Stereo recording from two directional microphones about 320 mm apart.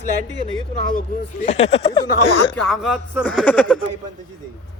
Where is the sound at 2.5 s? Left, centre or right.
Centre.